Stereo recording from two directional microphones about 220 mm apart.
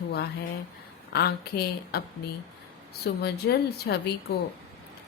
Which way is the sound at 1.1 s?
45° left (ahead or behind).